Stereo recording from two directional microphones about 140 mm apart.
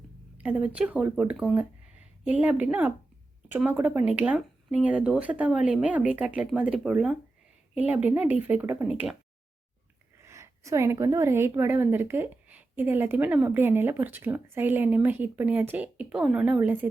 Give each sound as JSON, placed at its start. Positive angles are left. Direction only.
{"t": 0.3, "sound": "a woman's voice", "side_deg": -10}
{"t": 10.2, "sound": "a woman's voice", "side_deg": -20}